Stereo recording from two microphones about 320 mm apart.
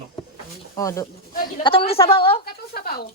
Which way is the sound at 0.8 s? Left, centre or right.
Centre.